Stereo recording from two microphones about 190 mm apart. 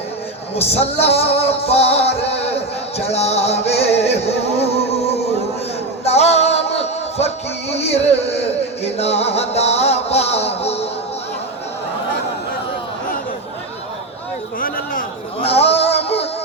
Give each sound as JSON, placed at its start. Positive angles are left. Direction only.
{"t": 0.5, "sound": "music", "side_deg": 35}
{"t": 2.2, "sound": "a sound", "side_deg": 35}
{"t": 3.7, "sound": "music", "side_deg": 35}
{"t": 15.4, "sound": "music", "side_deg": 30}